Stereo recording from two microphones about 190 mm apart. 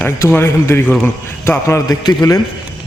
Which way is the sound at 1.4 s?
15° left (ahead or behind).